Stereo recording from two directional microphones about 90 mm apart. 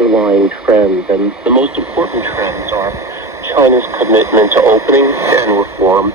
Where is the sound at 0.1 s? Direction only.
10° right (ahead or behind).